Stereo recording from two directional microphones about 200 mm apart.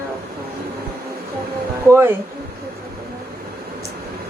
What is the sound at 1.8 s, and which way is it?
Speech, 10° right (ahead or behind).